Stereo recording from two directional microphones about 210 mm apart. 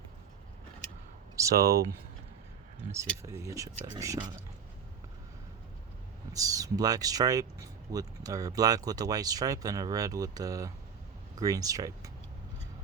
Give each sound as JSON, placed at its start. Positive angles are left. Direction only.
{"t": 1.4, "sound": "speech", "side_deg": -15}
{"t": 3.2, "sound": "speech", "side_deg": -15}
{"t": 6.3, "sound": "speech", "side_deg": -15}